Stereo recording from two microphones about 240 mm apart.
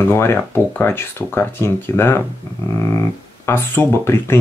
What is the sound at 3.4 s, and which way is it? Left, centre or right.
Speech, centre.